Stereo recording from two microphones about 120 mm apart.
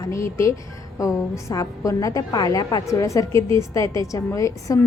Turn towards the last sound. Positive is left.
turn(degrees=25)  # may be behind; listen again after turning